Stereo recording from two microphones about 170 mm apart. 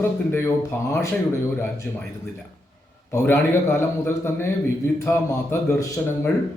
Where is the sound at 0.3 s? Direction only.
15° left (ahead or behind).